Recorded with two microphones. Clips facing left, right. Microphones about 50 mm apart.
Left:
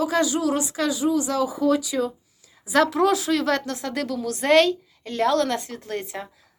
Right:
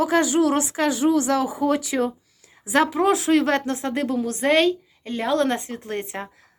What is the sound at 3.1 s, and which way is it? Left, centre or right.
A woman's voice, right.